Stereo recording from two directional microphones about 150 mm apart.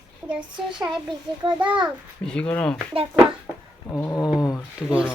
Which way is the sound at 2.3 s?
10° left (ahead or behind).